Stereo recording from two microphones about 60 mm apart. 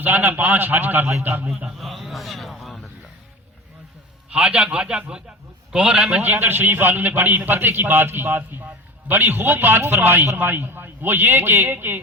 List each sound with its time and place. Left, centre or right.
0.0 s a man's voice: right
1.8 s a sound: centre
4.3 s a man's voice: centre
6.2 s a man's voice: right